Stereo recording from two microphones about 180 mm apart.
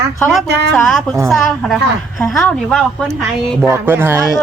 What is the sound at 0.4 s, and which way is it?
Speech, 70° right (ahead or behind).